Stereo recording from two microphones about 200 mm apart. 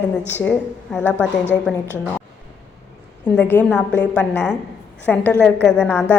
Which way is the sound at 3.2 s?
5° left (ahead or behind).